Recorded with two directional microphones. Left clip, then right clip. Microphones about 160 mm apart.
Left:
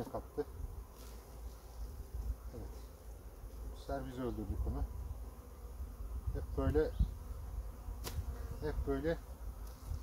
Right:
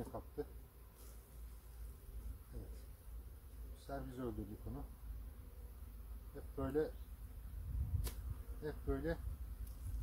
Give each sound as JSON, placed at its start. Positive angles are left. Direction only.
{"t": 0.0, "sound": "a sound", "side_deg": -5}
{"t": 3.8, "sound": "speech", "side_deg": -5}
{"t": 6.5, "sound": "bee", "side_deg": -5}
{"t": 8.0, "sound": "insect", "side_deg": -10}
{"t": 8.6, "sound": "bee", "side_deg": -5}